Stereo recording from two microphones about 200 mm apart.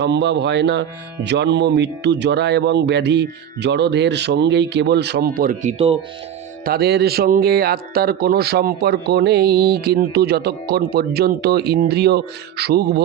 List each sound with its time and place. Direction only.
0.0 s speech: 60° right (ahead or behind)
5.7 s speech: 30° right (ahead or behind)
6.7 s speech: 55° right (ahead or behind)